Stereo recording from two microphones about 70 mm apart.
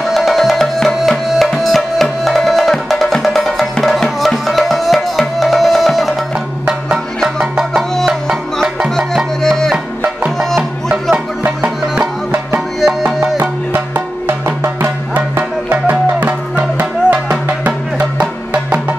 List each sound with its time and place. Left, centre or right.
0.0 s music: centre
7.3 s music: centre
8.9 s music: centre
12.5 s music: centre
13.4 s music: right